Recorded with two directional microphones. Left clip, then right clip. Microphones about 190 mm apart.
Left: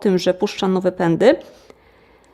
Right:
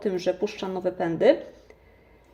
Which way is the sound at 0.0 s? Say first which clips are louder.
Left 8 dB; 45° left (ahead or behind).